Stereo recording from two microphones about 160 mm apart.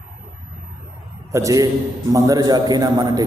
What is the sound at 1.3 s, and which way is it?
A man's voice, 20° right (ahead or behind).